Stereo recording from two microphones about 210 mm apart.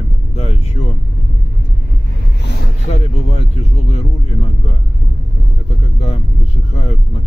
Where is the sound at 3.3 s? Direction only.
30° left (ahead or behind).